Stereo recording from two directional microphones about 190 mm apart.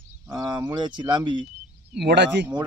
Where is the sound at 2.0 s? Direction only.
65° right (ahead or behind).